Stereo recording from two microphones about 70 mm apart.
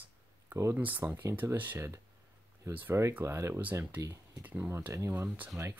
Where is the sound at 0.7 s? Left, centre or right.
Right.